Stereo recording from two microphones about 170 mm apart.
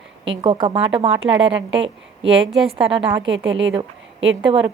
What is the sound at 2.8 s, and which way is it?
Speech, 30° right (ahead or behind).